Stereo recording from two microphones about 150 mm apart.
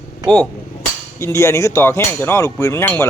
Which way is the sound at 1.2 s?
20° left (ahead or behind).